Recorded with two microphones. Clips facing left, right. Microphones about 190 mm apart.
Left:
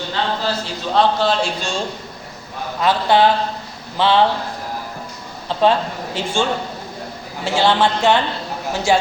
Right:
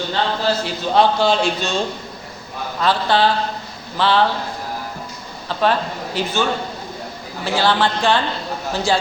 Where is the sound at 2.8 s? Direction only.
20° left (ahead or behind).